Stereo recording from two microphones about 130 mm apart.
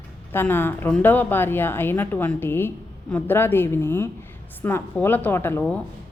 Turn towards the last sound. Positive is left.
turn(degrees=15)  # may be behind; listen again after turning